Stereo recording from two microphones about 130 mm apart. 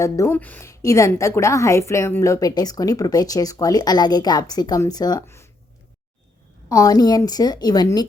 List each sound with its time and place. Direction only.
0.0 s a woman's voice: 25° left (ahead or behind)
0.3 s a woman's voice: 15° left (ahead or behind)
0.7 s a woman's voice: 25° left (ahead or behind)
6.7 s a woman's voice: 30° left (ahead or behind)